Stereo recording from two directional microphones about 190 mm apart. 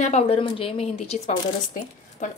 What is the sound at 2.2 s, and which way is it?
Speech, 40° left (ahead or behind).